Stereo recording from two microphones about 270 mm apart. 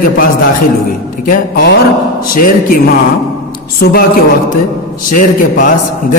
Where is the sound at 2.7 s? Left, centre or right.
Left.